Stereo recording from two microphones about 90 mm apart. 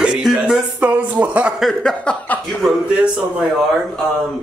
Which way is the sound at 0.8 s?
15° right (ahead or behind).